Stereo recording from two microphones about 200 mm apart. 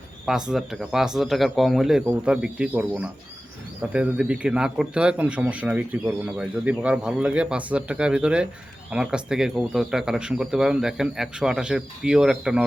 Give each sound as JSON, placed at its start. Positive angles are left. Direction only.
{"t": 0.3, "sound": "a man's voice", "side_deg": -5}